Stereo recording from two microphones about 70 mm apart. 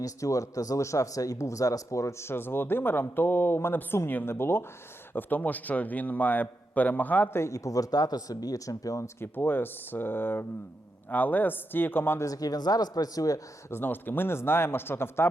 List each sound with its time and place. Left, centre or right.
0.0 s a man's voice: left
7.3 s speech: left
9.2 s a man's voice: left
12.2 s speech: left
13.7 s speech: left